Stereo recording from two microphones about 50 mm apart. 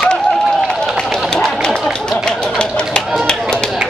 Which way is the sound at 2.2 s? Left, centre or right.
Centre.